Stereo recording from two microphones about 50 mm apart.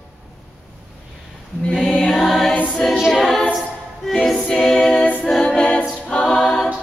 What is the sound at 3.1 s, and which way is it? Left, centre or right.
A capella, centre.